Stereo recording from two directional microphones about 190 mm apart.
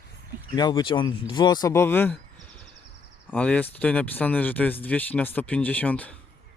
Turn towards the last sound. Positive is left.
turn(degrees=10)  # may be behind; listen again after turning